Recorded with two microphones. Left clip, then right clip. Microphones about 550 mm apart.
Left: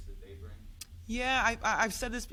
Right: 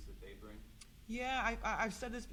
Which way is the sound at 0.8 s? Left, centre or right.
Centre.